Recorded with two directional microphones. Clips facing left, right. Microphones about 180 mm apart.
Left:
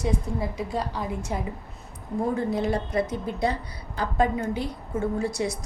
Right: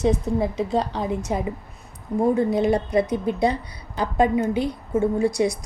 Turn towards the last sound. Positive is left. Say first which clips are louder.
# right 6 dB
turn(degrees=-15)  # may be behind; listen again after turning